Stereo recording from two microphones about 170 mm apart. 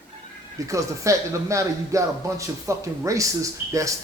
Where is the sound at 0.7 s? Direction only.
20° right (ahead or behind).